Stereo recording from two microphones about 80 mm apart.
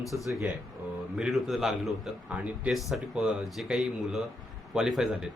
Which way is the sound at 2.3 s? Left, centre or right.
Centre.